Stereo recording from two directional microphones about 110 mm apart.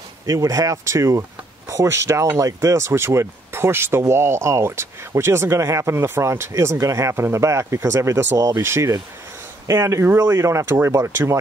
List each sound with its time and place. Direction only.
0.3 s speech: 30° right (ahead or behind)